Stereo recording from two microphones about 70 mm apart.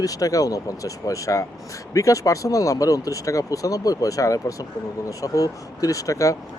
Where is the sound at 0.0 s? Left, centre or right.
Left.